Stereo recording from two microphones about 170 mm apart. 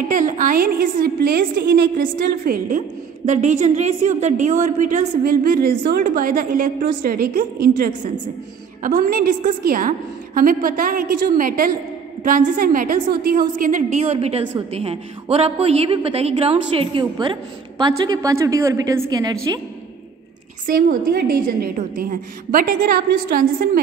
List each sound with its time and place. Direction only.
0.1 s a woman's voice: 50° right (ahead or behind)
3.3 s a woman's voice: 45° right (ahead or behind); by 19.3 s 20° right (ahead or behind)
20.6 s a woman's voice: 60° right (ahead or behind)